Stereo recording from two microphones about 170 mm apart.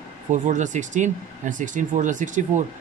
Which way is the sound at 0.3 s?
45° right (ahead or behind).